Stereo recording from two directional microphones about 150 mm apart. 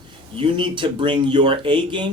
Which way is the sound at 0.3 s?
35° right (ahead or behind).